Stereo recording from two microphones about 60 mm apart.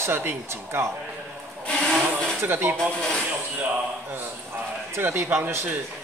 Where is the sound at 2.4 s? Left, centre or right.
Right.